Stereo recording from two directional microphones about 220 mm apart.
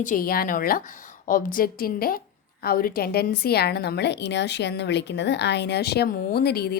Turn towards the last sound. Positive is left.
turn(degrees=45)  # may be behind; listen again after turning